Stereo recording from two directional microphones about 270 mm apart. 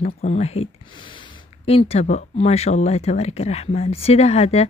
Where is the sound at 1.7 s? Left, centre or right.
Left.